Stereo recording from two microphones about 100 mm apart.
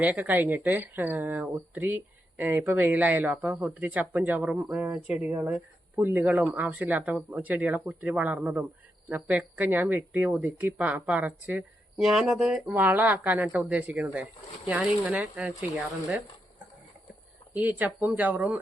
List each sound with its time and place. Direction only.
0.0 s speech: 15° right (ahead or behind)
11.9 s speech: 5° right (ahead or behind)
15.7 s speech: centre (ahead or behind)
17.5 s speech: 15° right (ahead or behind)